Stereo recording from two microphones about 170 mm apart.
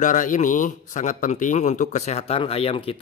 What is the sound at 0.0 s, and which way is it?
A man's voice, 50° left (ahead or behind).